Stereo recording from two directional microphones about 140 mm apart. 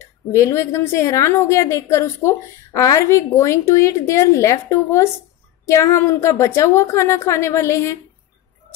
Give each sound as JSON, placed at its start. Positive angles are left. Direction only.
{"t": 0.0, "sound": "a woman's voice", "side_deg": 20}